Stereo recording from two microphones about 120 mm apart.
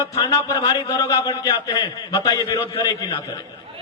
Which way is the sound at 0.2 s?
35° left (ahead or behind).